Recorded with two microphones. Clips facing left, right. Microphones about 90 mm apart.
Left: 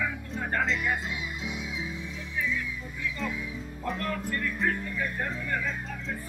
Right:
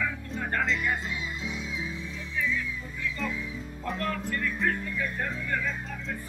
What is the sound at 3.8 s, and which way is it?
Music, centre (ahead or behind).